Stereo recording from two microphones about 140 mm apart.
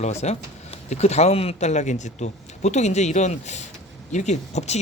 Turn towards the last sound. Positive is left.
turn(degrees=55)  # may be behind; listen again after turning